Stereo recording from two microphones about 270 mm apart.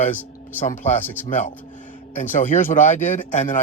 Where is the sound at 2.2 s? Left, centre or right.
Left.